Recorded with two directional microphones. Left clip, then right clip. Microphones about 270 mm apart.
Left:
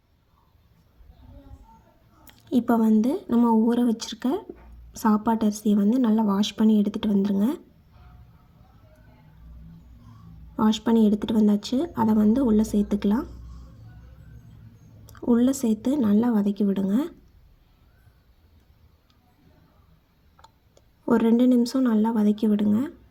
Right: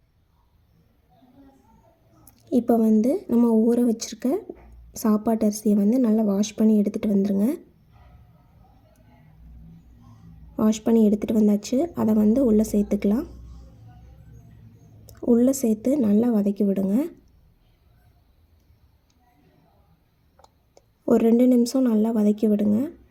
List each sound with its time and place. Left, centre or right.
2.5 s a woman's voice: left
3.0 s speech: centre
5.7 s speech: centre
10.5 s speech: centre
15.0 s speech: centre
20.7 s speech: centre